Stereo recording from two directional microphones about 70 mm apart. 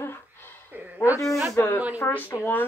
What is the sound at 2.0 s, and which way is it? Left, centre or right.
Speech, left.